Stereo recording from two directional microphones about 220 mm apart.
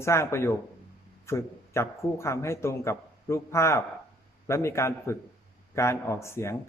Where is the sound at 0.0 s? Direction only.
10° left (ahead or behind).